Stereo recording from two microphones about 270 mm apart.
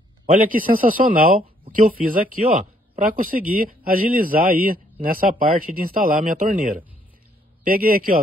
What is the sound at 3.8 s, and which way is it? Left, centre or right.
A man's voice, right.